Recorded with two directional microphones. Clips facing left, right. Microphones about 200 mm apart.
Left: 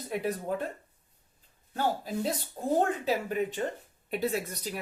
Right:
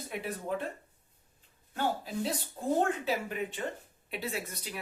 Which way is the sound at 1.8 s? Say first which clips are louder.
Left 2 dB; 40° left (ahead or behind).